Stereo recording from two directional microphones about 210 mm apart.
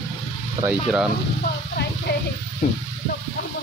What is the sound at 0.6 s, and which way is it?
Speech, 5° right (ahead or behind).